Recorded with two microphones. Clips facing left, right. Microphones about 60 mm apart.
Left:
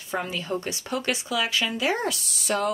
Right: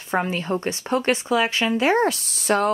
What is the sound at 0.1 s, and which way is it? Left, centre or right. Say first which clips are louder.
Speech: right 5 dB; right.